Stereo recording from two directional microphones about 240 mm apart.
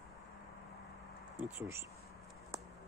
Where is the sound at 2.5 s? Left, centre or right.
Centre.